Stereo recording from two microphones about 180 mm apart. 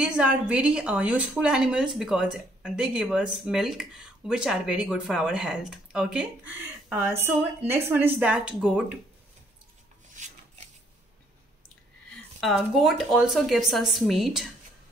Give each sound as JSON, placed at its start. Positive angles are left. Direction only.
{"t": 0.0, "sound": "a woman's voice", "side_deg": -5}
{"t": 10.2, "sound": "a sound", "side_deg": -45}
{"t": 12.4, "sound": "a woman's voice", "side_deg": 0}